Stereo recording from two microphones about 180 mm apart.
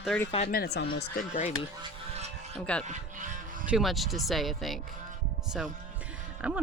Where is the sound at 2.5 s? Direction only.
5° left (ahead or behind).